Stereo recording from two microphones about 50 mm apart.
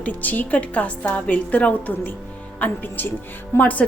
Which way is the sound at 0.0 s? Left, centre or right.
Left.